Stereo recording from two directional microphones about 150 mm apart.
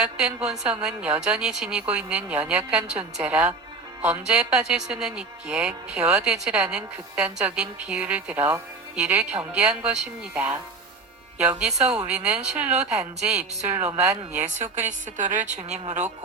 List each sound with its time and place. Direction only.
0.0 s speech: 5° right (ahead or behind)
14.3 s a woman's voice: 55° right (ahead or behind)